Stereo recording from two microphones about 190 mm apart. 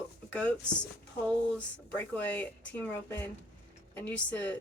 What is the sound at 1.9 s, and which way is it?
A woman's voice, 10° left (ahead or behind).